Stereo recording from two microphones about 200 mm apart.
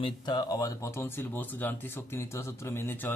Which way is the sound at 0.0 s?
20° left (ahead or behind).